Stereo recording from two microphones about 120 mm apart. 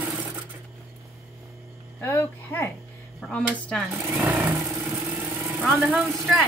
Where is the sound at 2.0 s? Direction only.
15° left (ahead or behind).